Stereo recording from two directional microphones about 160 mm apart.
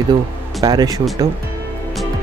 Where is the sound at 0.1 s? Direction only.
25° right (ahead or behind).